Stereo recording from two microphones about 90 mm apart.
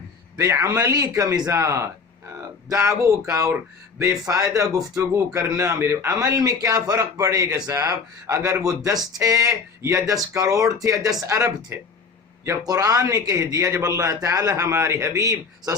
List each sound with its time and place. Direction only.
0.3 s a man's voice: 35° right (ahead or behind)
6.1 s a man's voice: 40° right (ahead or behind)
12.6 s a man's voice: 40° right (ahead or behind)